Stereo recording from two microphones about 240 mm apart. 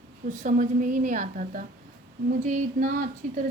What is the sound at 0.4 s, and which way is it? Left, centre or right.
A woman's voice, right.